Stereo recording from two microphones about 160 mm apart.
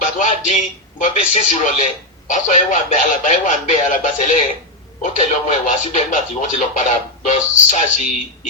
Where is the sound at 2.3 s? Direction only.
50° left (ahead or behind).